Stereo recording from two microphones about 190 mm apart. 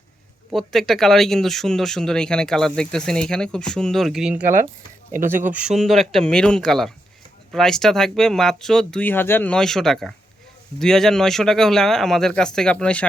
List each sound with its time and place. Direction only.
0.5 s speech: centre (ahead or behind)
4.4 s speech: 45° right (ahead or behind)
5.6 s speech: centre (ahead or behind)